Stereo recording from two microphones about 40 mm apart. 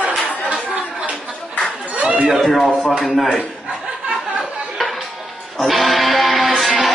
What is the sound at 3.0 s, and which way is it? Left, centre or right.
Speech, centre.